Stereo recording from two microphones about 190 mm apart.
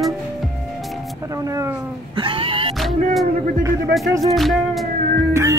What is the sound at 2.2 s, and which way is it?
Music, 25° right (ahead or behind).